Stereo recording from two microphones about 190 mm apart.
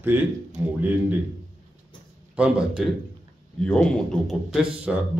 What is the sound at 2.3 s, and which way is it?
A man's voice, 5° right (ahead or behind).